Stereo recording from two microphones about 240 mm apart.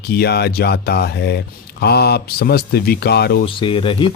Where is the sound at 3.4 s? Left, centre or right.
Left.